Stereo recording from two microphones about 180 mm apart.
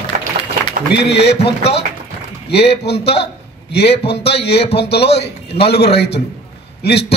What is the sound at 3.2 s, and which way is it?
A man's voice, 70° left (ahead or behind).